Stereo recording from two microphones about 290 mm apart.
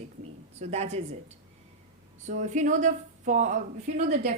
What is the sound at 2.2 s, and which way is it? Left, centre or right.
A woman's voice, right.